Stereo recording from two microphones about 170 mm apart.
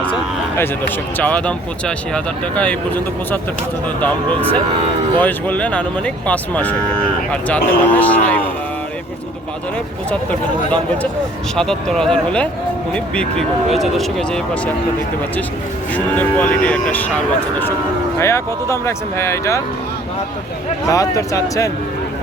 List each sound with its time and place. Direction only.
1.2 s speech: 10° left (ahead or behind)
10.7 s speech: 10° left (ahead or behind)
16.1 s speech: 10° left (ahead or behind)
18.2 s speech: 15° left (ahead or behind)
20.8 s speech: 20° left (ahead or behind)